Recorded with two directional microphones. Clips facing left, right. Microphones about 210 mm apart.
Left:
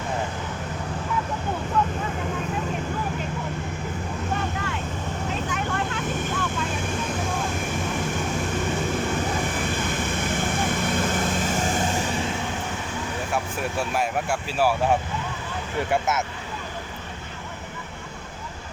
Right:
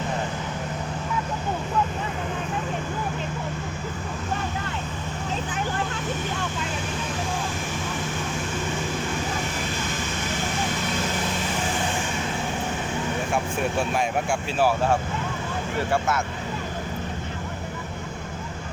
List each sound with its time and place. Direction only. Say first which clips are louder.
13.9 s speech: right 1 dB; 5° left (ahead or behind)
15.9 s speech: left 1 dB; 20° left (ahead or behind)